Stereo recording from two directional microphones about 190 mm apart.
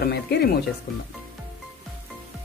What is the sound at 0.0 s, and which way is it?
Speech, 55° left (ahead or behind).